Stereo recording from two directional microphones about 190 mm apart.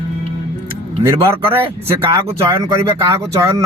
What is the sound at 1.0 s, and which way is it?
Speech, 15° right (ahead or behind).